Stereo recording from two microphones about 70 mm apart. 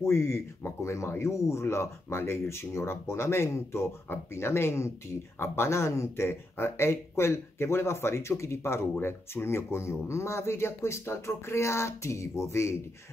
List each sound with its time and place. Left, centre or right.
0.0 s speech: left